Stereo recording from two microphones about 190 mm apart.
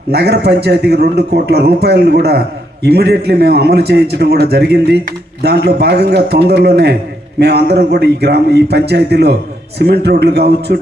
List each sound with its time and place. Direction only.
0.1 s a man's voice: 60° right (ahead or behind)